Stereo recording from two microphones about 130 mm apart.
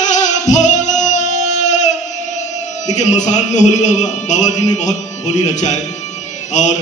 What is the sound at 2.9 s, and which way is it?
A man's voice, 65° left (ahead or behind).